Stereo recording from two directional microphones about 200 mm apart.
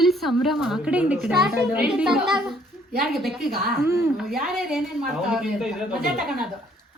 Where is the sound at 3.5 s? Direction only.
50° right (ahead or behind).